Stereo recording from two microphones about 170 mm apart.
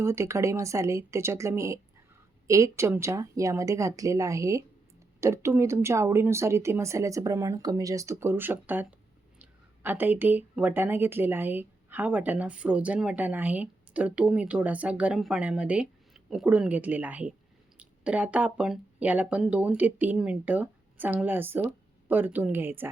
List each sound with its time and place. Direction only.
0.0 s speech: 15° right (ahead or behind)